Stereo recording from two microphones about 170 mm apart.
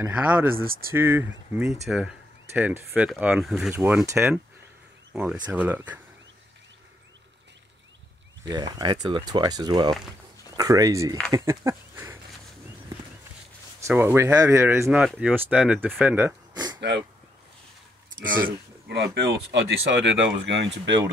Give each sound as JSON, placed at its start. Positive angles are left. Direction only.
{"t": 0.1, "sound": "speech", "side_deg": -10}
{"t": 0.7, "sound": "speech", "side_deg": -60}
{"t": 0.9, "sound": "speech", "side_deg": -10}
{"t": 8.5, "sound": "speech", "side_deg": -25}
{"t": 13.8, "sound": "speech", "side_deg": -15}
{"t": 16.5, "sound": "a sound", "side_deg": -25}
{"t": 18.2, "sound": "speech", "side_deg": -65}
{"t": 19.1, "sound": "speech", "side_deg": -80}
{"t": 20.2, "sound": "speech", "side_deg": -90}